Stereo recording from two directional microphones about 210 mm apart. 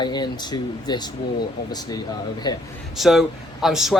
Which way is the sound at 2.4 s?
20° left (ahead or behind).